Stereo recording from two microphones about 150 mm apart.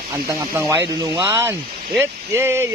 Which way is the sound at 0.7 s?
20° right (ahead or behind).